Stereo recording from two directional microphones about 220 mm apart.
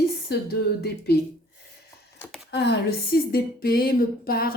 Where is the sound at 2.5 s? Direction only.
50° left (ahead or behind).